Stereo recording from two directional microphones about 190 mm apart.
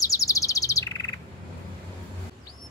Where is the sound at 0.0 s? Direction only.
15° left (ahead or behind).